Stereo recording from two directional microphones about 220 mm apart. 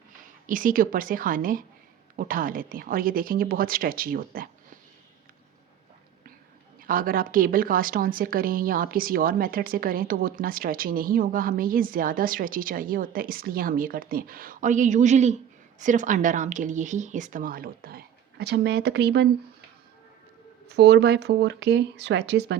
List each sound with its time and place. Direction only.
0.2 s a woman's voice: 40° right (ahead or behind)
6.8 s speech: 40° right (ahead or behind)
20.7 s speech: 50° right (ahead or behind)